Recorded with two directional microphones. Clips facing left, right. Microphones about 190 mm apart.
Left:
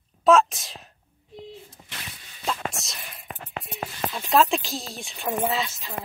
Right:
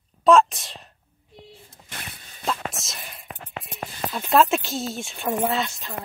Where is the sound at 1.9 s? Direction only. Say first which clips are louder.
Right 7 dB; 50° right (ahead or behind).